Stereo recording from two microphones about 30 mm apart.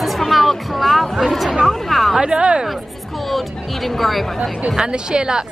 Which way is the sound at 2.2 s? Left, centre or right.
Right.